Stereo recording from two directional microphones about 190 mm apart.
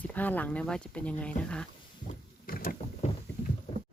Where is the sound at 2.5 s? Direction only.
50° left (ahead or behind).